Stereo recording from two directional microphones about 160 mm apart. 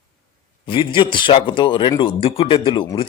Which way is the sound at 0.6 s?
30° left (ahead or behind).